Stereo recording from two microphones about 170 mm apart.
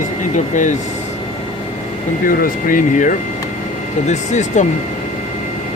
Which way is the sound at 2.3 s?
55° left (ahead or behind).